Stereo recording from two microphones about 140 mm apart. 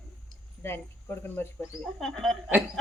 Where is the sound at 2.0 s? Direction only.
5° left (ahead or behind).